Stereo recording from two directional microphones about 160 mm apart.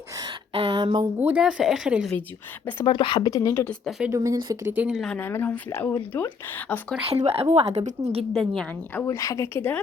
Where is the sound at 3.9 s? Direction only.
5° right (ahead or behind).